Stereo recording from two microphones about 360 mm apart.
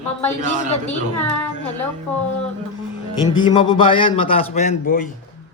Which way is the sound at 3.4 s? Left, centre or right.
Centre.